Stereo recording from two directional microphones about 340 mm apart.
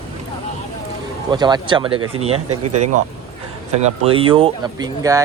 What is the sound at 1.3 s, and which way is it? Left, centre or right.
Speech, centre.